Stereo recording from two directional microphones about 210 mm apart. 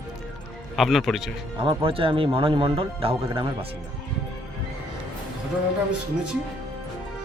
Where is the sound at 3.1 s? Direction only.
15° right (ahead or behind).